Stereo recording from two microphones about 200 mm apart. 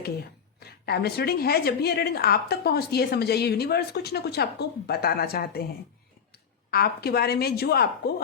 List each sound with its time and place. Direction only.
0.6 s a woman's voice: 50° left (ahead or behind)